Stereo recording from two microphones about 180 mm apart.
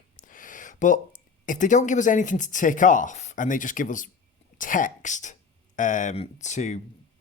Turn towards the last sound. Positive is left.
turn(degrees=40)  # may be behind; listen again after turning